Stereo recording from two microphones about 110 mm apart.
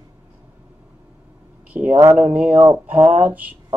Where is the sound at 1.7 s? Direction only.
15° right (ahead or behind).